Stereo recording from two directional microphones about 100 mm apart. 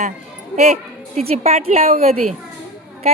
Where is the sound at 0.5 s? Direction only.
90° right.